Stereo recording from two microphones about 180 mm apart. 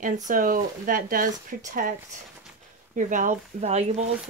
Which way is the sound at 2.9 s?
45° right (ahead or behind).